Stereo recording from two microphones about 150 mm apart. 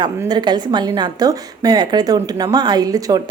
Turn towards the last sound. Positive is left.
turn(degrees=-25)  # may be behind; listen again after turning